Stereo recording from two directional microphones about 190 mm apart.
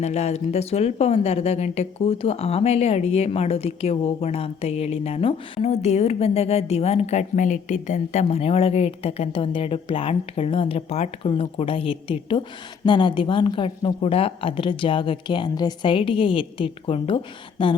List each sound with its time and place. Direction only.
0.0 s speech: 35° left (ahead or behind)